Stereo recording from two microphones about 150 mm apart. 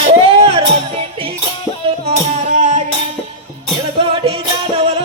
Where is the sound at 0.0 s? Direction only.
40° right (ahead or behind).